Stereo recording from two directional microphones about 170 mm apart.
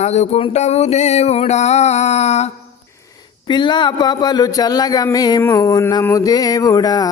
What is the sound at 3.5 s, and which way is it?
Speech, 25° left (ahead or behind).